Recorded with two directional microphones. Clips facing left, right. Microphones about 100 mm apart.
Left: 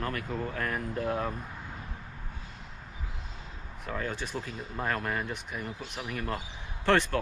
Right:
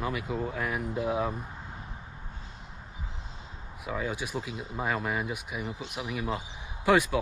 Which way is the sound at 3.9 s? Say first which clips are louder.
Right 2 dB; 10° right (ahead or behind).